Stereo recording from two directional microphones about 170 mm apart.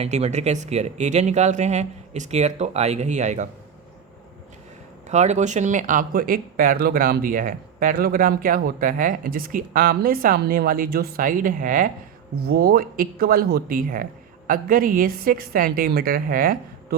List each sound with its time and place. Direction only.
0.0 s speech: 40° right (ahead or behind)
5.0 s speech: 45° right (ahead or behind)
12.5 s speech: 60° right (ahead or behind)